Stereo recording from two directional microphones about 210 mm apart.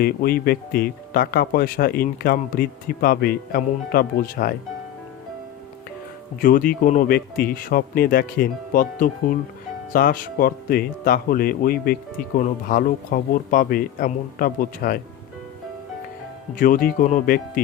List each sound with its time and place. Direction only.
0.0 s speech: 45° left (ahead or behind)
6.4 s speech: 45° left (ahead or behind)
16.6 s speech: 40° left (ahead or behind)